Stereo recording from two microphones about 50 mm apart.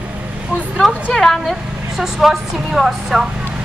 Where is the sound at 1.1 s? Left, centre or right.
Centre.